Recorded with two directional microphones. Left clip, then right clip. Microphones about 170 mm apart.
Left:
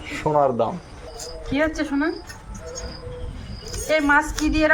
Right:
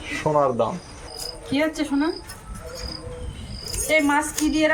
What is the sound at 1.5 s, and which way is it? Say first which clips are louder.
Speech: left 1 dB; 15° left (ahead or behind).